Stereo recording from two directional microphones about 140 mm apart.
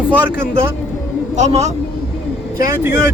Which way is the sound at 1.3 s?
55° right (ahead or behind).